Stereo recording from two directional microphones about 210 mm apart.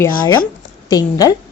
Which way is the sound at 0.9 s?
15° left (ahead or behind).